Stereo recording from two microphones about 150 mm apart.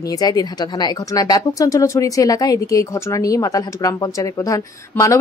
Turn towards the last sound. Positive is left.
turn(degrees=20)  # may be behind; listen again after turning